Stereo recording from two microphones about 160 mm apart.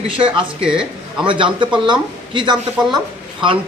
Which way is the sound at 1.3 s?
30° right (ahead or behind).